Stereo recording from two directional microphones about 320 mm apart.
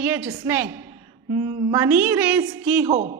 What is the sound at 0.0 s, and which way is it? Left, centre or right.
A woman's voice, centre.